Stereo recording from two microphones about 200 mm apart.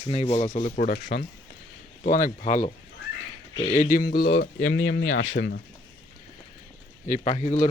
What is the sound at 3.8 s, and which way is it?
Speech, 45° left (ahead or behind).